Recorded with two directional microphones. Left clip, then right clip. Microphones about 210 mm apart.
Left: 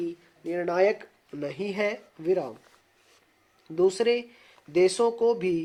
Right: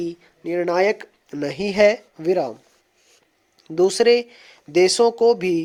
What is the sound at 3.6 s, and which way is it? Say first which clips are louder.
Speech: right 7 dB; 45° right (ahead or behind).